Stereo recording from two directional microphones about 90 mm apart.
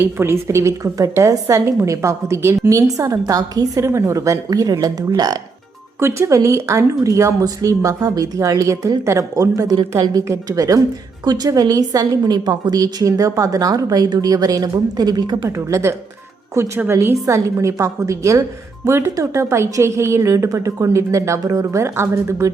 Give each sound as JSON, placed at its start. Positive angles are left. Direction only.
{"t": 0.0, "sound": "a woman's voice", "side_deg": -30}
{"t": 6.0, "sound": "a woman's voice", "side_deg": -30}
{"t": 15.4, "sound": "a woman's voice", "side_deg": -35}